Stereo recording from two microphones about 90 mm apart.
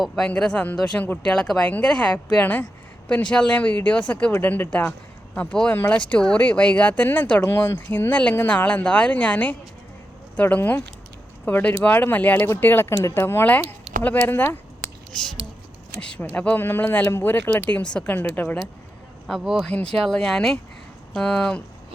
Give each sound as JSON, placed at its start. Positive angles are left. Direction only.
{"t": 0.3, "sound": "speech", "side_deg": 10}
{"t": 15.1, "sound": "speech", "side_deg": 5}
{"t": 17.7, "sound": "speech", "side_deg": 10}
{"t": 19.3, "sound": "speech", "side_deg": -5}
{"t": 19.7, "sound": "speech", "side_deg": 10}